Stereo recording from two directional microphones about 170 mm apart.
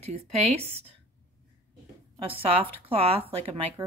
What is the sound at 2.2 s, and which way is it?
Speech, 35° right (ahead or behind).